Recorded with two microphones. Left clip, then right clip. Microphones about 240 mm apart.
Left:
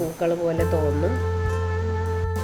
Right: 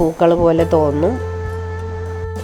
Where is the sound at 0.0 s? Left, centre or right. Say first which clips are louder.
Right 10 dB; right.